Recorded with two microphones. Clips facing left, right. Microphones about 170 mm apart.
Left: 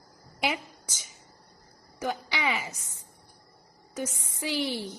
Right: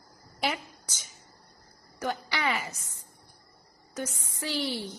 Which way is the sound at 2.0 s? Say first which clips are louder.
Even; 5° left (ahead or behind).